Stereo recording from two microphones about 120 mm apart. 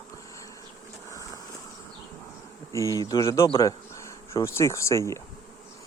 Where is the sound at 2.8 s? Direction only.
30° right (ahead or behind).